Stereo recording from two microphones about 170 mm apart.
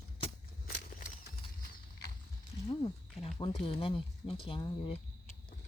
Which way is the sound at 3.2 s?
35° left (ahead or behind).